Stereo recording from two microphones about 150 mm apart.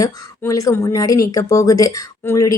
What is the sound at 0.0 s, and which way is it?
A woman's voice, 20° left (ahead or behind).